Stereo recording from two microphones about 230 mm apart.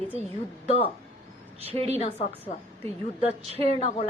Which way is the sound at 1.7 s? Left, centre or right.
Right.